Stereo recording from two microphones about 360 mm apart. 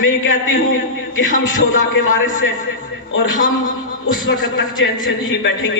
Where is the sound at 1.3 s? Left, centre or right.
Left.